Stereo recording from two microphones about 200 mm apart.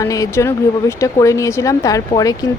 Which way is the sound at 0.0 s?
15° left (ahead or behind).